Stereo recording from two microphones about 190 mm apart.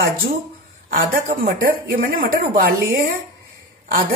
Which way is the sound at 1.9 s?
50° right (ahead or behind).